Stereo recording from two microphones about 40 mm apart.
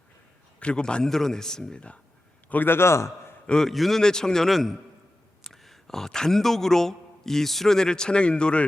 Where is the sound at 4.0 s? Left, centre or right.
Centre.